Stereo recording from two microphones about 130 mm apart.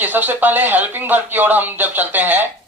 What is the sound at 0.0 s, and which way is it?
Speech, 15° right (ahead or behind).